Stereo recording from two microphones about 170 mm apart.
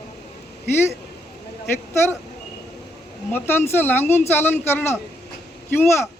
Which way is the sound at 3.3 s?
15° left (ahead or behind).